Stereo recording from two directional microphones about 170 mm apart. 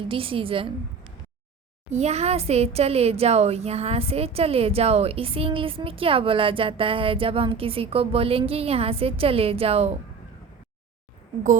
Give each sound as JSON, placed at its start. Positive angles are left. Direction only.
{"t": 0.0, "sound": "speech", "side_deg": -30}
{"t": 1.9, "sound": "speech", "side_deg": -40}